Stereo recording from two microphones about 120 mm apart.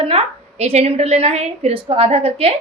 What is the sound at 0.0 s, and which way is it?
A woman's voice, 60° right (ahead or behind).